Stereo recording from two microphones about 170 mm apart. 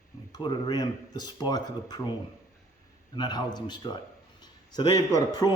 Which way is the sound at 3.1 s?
25° left (ahead or behind).